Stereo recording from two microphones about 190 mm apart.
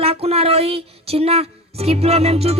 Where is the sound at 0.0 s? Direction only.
30° right (ahead or behind).